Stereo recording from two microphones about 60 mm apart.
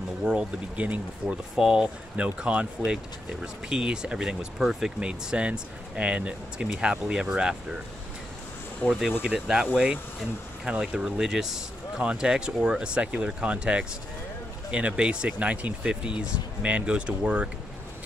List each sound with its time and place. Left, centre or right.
0.2 s speech: centre
1.6 s speech: centre
8.8 s speech: left
9.2 s speech: centre